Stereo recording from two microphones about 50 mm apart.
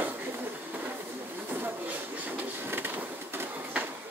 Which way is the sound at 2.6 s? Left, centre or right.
Right.